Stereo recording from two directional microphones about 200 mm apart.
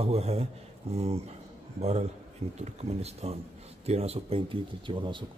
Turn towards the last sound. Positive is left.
turn(degrees=-25)  # may be behind; listen again after turning